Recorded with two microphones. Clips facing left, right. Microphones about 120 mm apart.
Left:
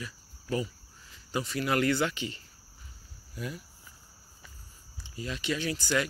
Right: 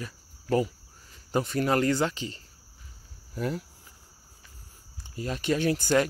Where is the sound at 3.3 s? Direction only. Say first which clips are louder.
Right 8 dB; 60° right (ahead or behind).